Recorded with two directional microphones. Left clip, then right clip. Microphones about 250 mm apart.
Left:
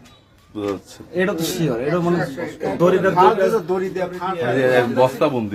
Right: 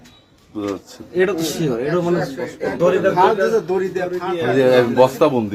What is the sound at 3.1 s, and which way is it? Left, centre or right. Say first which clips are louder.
Speech: left 1 dB; right.